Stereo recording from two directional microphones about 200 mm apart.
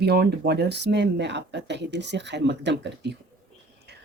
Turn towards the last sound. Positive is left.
turn(degrees=-60)  # may be behind; listen again after turning